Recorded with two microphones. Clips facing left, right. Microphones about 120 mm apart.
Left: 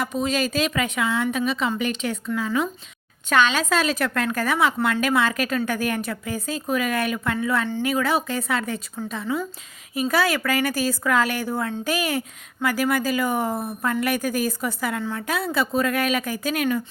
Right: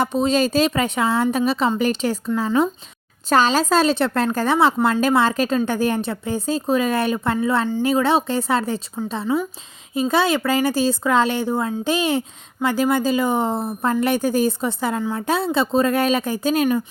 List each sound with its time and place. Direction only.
0.0 s a woman's voice: 30° right (ahead or behind)